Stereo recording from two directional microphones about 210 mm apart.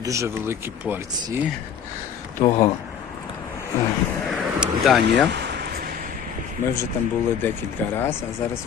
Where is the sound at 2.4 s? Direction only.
15° left (ahead or behind).